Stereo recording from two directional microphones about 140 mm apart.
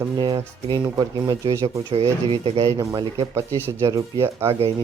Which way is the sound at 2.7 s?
30° right (ahead or behind).